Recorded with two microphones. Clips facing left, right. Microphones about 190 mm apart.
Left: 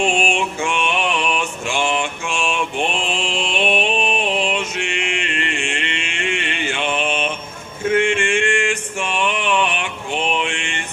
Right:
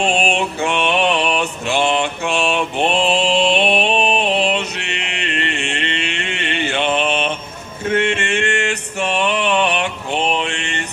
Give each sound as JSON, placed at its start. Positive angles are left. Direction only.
{"t": 0.0, "sound": "mantra", "side_deg": -35}
{"t": 7.9, "sound": "male singing", "side_deg": -40}